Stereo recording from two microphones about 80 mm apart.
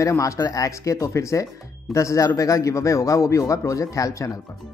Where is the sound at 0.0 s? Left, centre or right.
Left.